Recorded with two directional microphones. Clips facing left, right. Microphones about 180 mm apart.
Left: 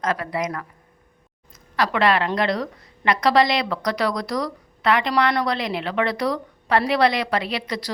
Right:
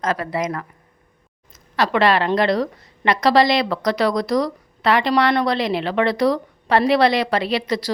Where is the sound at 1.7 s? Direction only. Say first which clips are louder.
Right 3 dB; 30° right (ahead or behind).